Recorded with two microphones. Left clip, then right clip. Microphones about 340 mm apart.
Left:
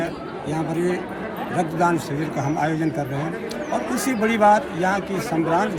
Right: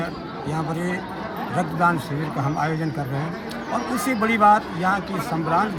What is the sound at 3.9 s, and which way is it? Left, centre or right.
Speech, right.